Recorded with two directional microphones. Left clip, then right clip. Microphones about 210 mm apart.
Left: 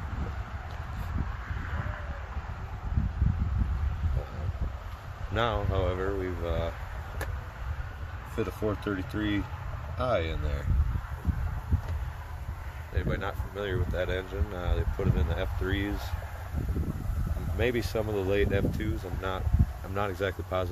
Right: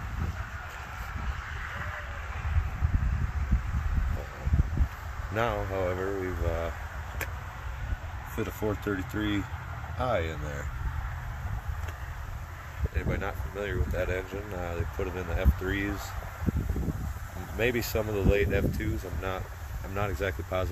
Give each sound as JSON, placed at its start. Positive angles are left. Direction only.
{"t": 1.6, "sound": "a sound", "side_deg": -50}
{"t": 5.3, "sound": "speech", "side_deg": 0}
{"t": 8.4, "sound": "speech", "side_deg": -5}
{"t": 12.9, "sound": "speech", "side_deg": 0}
{"t": 17.6, "sound": "speech", "side_deg": -5}